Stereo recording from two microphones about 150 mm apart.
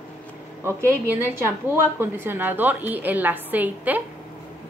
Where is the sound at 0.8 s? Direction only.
15° right (ahead or behind).